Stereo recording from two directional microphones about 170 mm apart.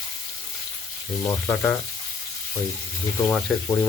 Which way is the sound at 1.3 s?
15° left (ahead or behind).